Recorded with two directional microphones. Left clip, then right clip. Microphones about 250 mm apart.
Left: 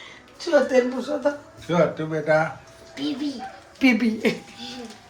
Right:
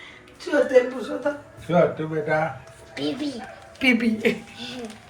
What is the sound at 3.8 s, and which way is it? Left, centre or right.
Speech, left.